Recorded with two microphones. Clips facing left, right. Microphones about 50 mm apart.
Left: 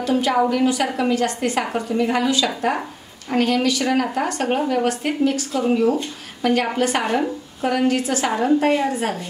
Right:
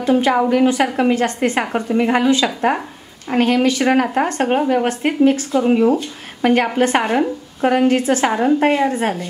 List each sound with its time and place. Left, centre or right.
0.0 s a woman's voice: right